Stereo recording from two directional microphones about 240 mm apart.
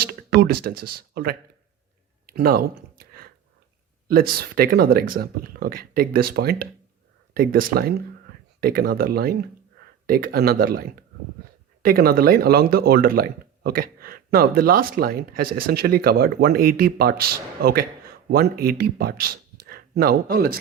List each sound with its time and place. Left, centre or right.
0.0 s speech: right
2.2 s a sound: right
4.1 s speech: right